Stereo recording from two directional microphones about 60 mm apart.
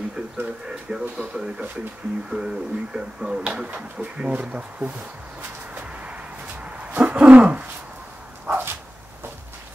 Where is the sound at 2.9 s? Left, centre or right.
Centre.